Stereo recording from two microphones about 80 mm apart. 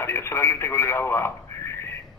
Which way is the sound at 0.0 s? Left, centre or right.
Left.